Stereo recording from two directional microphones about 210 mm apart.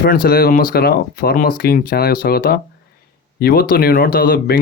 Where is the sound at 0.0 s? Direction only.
45° left (ahead or behind).